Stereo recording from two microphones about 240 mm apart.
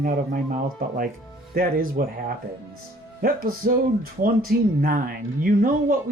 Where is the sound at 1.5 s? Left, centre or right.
Right.